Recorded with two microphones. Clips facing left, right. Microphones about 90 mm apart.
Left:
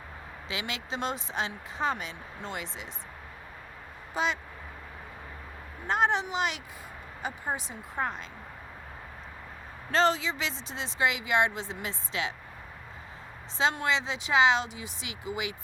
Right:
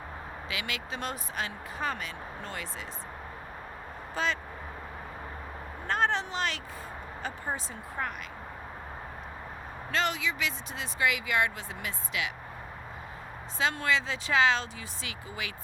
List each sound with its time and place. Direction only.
0.5 s speech: 25° left (ahead or behind)
4.1 s speech: 15° left (ahead or behind)
5.9 s speech: 15° left (ahead or behind)
9.9 s speech: 30° left (ahead or behind)
13.6 s speech: 25° left (ahead or behind)